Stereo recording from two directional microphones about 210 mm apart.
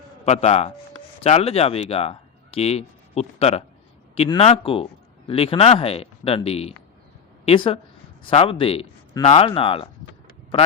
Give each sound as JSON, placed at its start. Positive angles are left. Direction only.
{"t": 0.3, "sound": "speech", "side_deg": 30}